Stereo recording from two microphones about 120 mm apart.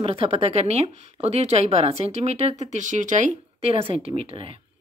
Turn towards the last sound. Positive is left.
turn(degrees=-50)  # may be behind; listen again after turning